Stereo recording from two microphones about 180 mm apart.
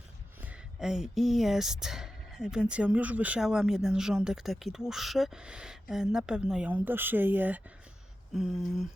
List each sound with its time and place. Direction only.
0.4 s speech: 5° right (ahead or behind)